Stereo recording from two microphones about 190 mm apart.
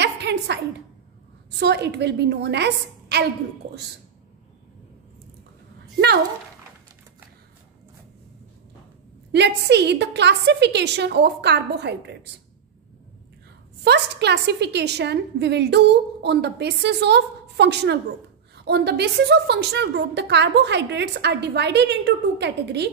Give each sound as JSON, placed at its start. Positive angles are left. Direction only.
{"t": 0.0, "sound": "a sound", "side_deg": -60}
{"t": 1.6, "sound": "a woman's voice", "side_deg": -65}
{"t": 9.3, "sound": "a woman's voice", "side_deg": -65}
{"t": 13.8, "sound": "a woman's voice", "side_deg": -60}